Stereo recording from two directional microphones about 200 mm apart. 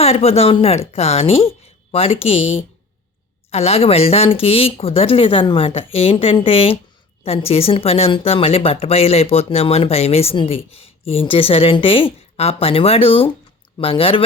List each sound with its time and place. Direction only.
0.0 s speech: 30° left (ahead or behind)